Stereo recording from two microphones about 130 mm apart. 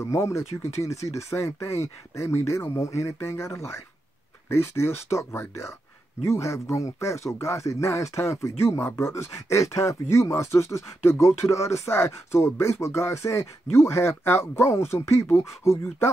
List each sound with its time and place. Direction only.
0.0 s speech: 25° left (ahead or behind)